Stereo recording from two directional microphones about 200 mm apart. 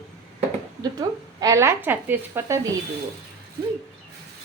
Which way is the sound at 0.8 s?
20° right (ahead or behind).